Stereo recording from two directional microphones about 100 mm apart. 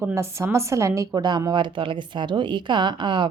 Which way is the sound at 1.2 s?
45° right (ahead or behind).